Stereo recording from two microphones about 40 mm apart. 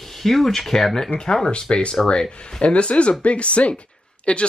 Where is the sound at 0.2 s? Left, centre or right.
Centre.